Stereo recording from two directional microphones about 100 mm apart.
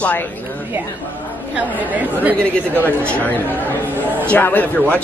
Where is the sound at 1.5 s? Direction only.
15° right (ahead or behind).